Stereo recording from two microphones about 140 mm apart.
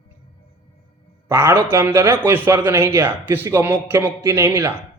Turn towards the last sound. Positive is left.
turn(degrees=-15)  # may be behind; listen again after turning